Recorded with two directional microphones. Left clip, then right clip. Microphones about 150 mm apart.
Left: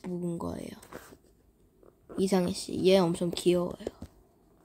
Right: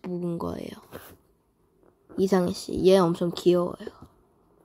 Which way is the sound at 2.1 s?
15° right (ahead or behind).